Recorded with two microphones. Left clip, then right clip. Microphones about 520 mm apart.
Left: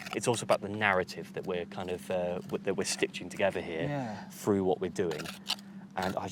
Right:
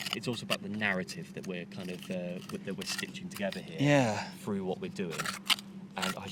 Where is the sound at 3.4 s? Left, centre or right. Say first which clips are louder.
Left 7 dB; left.